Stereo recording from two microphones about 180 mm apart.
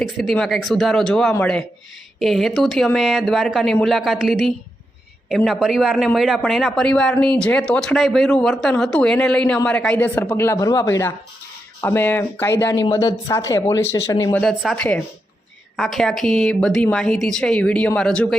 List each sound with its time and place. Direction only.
0.2 s speech: centre (ahead or behind); by 14.3 s 20° left (ahead or behind)
14.3 s speech: centre (ahead or behind)